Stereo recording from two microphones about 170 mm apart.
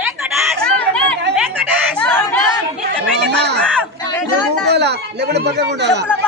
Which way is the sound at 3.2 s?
80° right.